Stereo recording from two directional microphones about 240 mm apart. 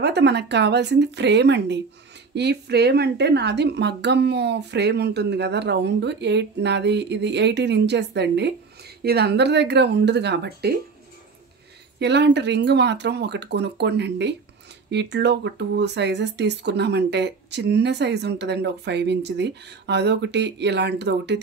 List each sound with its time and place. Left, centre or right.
0.0 s a woman's voice: right
12.0 s a woman's voice: right